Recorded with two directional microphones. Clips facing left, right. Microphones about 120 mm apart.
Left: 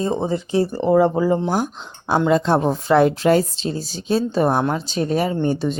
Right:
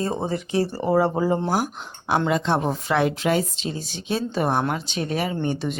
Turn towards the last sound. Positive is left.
turn(degrees=35)  # may be behind; listen again after turning